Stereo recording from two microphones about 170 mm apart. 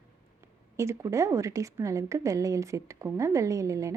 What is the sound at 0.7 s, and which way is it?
A woman's voice, 15° right (ahead or behind).